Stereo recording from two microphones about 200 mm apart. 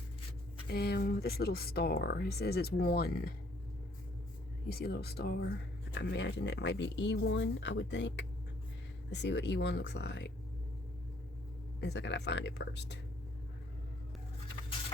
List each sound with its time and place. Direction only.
0.7 s speech: 55° left (ahead or behind)
4.7 s speech: 55° left (ahead or behind)
11.8 s speech: 60° left (ahead or behind)